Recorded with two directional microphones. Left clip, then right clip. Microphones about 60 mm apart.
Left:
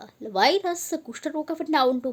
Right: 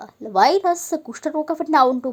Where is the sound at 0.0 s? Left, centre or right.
Right.